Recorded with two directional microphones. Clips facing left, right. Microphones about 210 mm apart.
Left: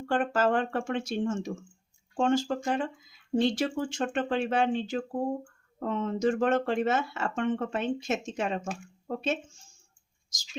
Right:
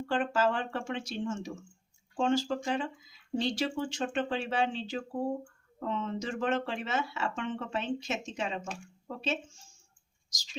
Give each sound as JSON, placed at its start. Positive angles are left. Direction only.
{"t": 0.1, "sound": "speech", "side_deg": 50}